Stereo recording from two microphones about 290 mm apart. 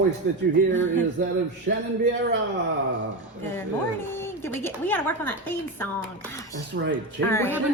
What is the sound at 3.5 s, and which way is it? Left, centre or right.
A woman's voice, centre.